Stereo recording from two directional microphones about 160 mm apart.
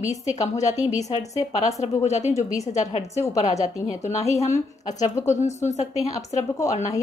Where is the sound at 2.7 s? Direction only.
45° left (ahead or behind).